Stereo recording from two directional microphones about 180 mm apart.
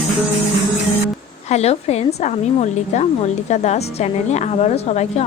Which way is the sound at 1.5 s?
35° left (ahead or behind).